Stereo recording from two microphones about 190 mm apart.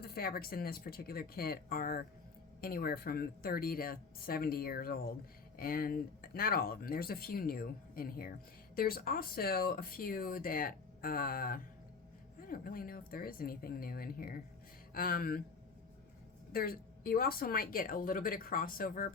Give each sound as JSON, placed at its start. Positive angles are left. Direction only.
{"t": 0.0, "sound": "speech", "side_deg": 55}
{"t": 16.5, "sound": "speech", "side_deg": 50}